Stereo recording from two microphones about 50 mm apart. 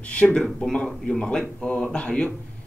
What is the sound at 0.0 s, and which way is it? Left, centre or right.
Speech, left.